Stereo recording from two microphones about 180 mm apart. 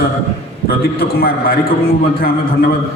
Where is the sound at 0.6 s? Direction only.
55° left (ahead or behind).